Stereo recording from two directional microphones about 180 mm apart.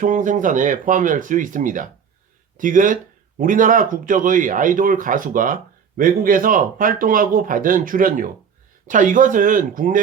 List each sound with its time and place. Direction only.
0.0 s speech: 45° right (ahead or behind)